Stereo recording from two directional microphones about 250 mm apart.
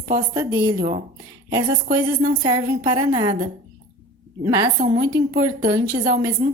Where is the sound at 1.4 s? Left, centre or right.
Centre.